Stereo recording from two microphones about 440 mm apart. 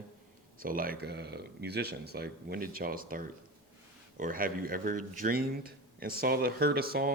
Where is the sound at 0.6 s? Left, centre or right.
Centre.